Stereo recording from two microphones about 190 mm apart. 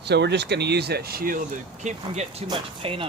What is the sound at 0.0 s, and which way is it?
Speech, 65° right (ahead or behind).